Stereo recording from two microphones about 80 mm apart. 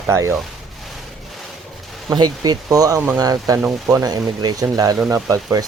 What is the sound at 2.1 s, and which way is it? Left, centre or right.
Speech, right.